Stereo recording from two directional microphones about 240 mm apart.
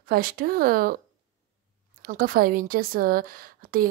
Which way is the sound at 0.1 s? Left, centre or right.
Right.